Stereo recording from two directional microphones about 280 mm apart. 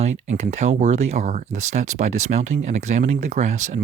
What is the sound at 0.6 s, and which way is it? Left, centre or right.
Speech, right.